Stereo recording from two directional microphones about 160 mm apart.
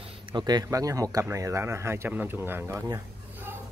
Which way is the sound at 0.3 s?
25° right (ahead or behind).